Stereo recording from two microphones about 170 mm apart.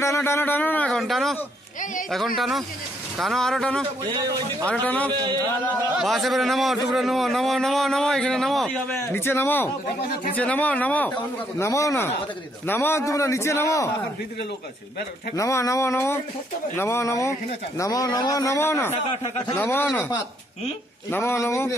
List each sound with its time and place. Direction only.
0.0 s a man's voice: 15° left (ahead or behind)
4.0 s a man's voice: 25° right (ahead or behind)
4.6 s speech: 10° left (ahead or behind)
5.1 s a man's voice: 25° right (ahead or behind)
5.9 s a man's voice: centre (ahead or behind)
8.9 s speech: 15° left (ahead or behind)
15.3 s speech: 20° left (ahead or behind)
21.1 s speech: 15° left (ahead or behind)